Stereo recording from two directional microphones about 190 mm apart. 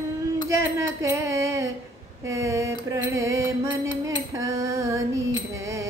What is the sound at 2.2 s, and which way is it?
Speech, 15° right (ahead or behind).